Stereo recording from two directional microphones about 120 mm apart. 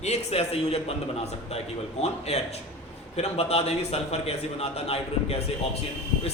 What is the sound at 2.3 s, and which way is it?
A man's voice, 60° left (ahead or behind).